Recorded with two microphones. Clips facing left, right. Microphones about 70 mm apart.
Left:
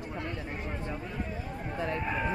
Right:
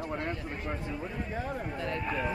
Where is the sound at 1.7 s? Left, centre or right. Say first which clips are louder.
Left 4 dB; left.